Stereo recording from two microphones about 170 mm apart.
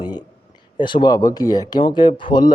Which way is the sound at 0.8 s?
30° left (ahead or behind).